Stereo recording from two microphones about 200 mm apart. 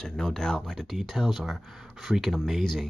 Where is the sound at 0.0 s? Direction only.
5° left (ahead or behind).